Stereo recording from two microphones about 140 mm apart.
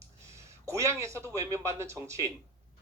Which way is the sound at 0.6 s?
20° right (ahead or behind).